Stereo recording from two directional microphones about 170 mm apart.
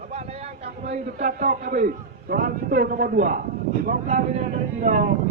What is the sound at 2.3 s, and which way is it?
A man's voice, 55° right (ahead or behind).